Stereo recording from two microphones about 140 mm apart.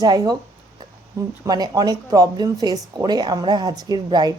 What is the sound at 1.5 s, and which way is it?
Speech, 30° right (ahead or behind).